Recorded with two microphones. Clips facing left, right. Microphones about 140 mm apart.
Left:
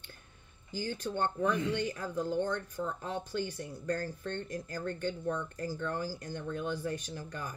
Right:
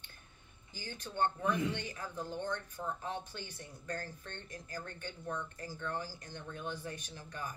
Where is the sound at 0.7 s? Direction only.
50° left (ahead or behind).